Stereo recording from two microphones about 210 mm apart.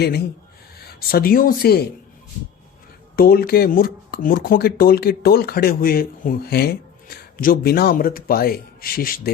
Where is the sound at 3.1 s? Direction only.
45° left (ahead or behind).